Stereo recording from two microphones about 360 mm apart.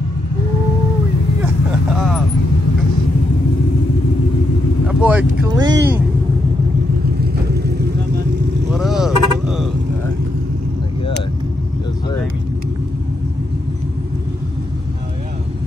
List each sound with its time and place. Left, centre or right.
1.4 s vehicle: centre
4.8 s vehicle: centre
7.5 s vehicle: right
8.7 s vehicle: centre